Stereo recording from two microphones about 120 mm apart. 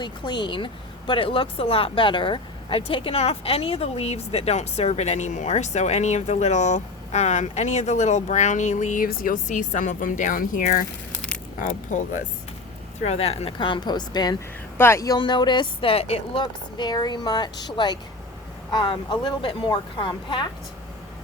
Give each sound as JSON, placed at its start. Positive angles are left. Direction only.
{"t": 0.0, "sound": "speech", "side_deg": 40}
{"t": 13.1, "sound": "speech", "side_deg": 60}
{"t": 14.8, "sound": "speech", "side_deg": 25}